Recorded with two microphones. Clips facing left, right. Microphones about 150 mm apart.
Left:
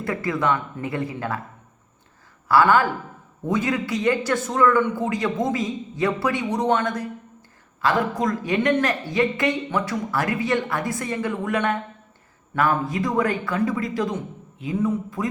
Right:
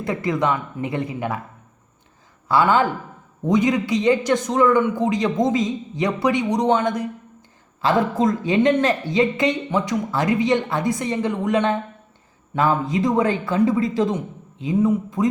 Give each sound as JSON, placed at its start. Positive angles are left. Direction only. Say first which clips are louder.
{"t": 0.0, "sound": "speech", "louder": "right 2 dB", "side_deg": -20}
{"t": 2.5, "sound": "speech", "louder": "even", "side_deg": -20}